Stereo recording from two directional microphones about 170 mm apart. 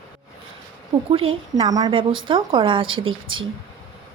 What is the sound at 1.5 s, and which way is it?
A woman's voice, 20° right (ahead or behind).